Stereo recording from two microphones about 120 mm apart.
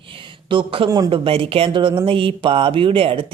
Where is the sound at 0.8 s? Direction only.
30° right (ahead or behind).